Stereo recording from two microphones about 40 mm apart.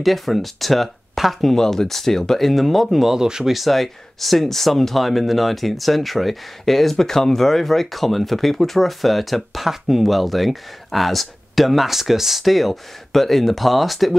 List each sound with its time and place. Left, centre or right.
0.0 s speech: centre
1.5 s speech: centre
3.2 s speech: centre
3.5 s speech: centre